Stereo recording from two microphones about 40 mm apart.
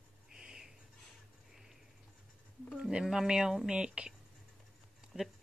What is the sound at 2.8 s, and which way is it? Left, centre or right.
Speech, right.